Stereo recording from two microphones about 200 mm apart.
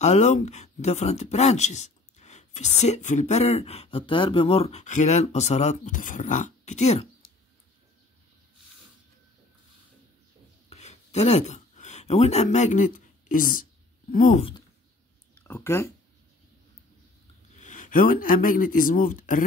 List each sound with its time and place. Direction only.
0.0 s speech: 35° left (ahead or behind)
10.7 s a sound: 35° left (ahead or behind)
14.1 s speech: 40° left (ahead or behind)
15.3 s speech: 10° left (ahead or behind)
17.6 s speech: 40° left (ahead or behind)